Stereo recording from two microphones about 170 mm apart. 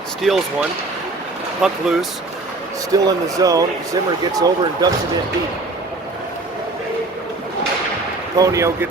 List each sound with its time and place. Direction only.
0.2 s speech: centre (ahead or behind)
1.6 s speech: centre (ahead or behind)
2.9 s speech: 20° right (ahead or behind)
8.4 s speech: 20° right (ahead or behind)